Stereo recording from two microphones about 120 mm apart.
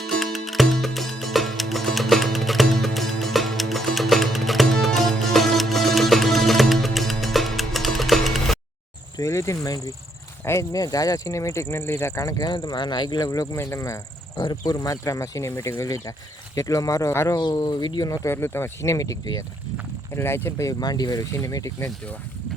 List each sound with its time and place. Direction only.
0.0 s music: centre (ahead or behind)
9.1 s speech: 25° left (ahead or behind)
17.3 s speech: 35° left (ahead or behind)
20.1 s speech: 20° left (ahead or behind)